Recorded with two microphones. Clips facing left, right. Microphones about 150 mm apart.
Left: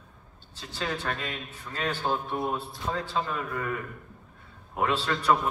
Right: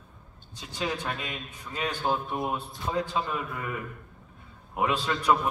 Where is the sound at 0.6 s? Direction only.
15° right (ahead or behind).